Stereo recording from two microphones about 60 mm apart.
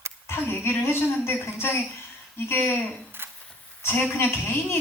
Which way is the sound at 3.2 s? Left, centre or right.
Right.